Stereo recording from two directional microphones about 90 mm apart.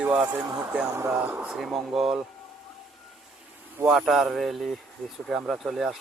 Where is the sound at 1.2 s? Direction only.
15° right (ahead or behind).